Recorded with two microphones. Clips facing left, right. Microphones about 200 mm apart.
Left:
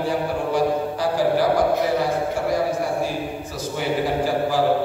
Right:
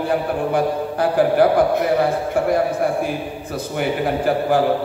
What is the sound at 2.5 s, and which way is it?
Speech, 55° right (ahead or behind).